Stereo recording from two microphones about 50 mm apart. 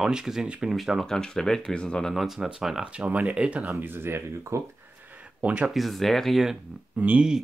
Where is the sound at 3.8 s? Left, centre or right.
Right.